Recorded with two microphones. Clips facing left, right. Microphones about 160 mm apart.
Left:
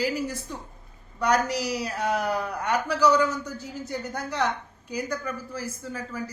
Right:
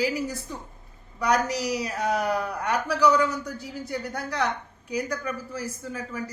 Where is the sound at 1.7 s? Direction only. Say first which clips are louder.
Right 1 dB; centre (ahead or behind).